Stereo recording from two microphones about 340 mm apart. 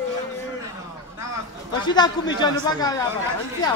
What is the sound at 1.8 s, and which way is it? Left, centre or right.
Speech, centre.